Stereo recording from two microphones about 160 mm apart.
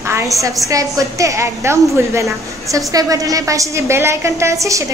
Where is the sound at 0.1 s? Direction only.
20° right (ahead or behind).